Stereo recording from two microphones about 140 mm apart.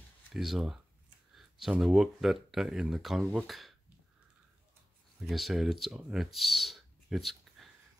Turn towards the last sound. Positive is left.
turn(degrees=0)  # may be behind; listen again after turning